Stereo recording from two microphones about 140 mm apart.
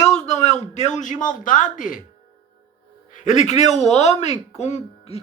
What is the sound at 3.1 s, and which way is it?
Speech, 55° left (ahead or behind).